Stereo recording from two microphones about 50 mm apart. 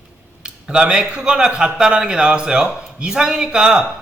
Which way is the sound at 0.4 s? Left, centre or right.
Centre.